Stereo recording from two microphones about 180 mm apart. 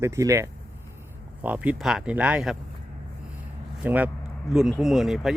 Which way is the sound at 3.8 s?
10° right (ahead or behind).